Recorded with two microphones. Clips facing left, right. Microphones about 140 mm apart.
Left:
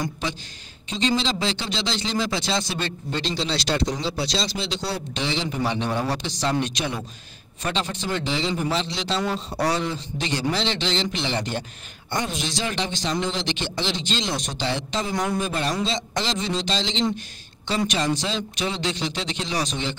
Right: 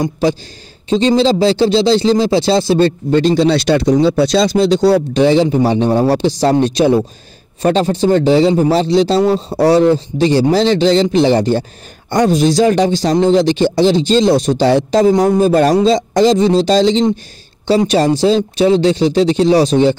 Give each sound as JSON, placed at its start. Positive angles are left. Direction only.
{"t": 0.0, "sound": "speech", "side_deg": -35}
{"t": 3.1, "sound": "speech", "side_deg": -50}